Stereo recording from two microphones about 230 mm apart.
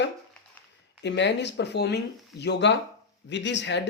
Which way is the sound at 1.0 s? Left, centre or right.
Left.